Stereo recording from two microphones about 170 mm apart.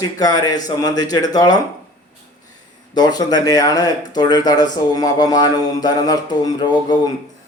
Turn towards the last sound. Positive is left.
turn(degrees=25)  # may be behind; listen again after turning